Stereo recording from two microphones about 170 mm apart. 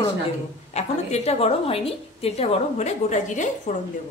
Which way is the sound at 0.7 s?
40° left (ahead or behind).